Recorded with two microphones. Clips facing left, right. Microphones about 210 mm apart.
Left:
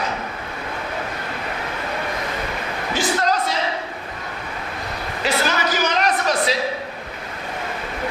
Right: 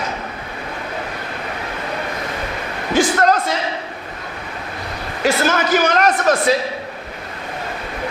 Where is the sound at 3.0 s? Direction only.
50° right (ahead or behind).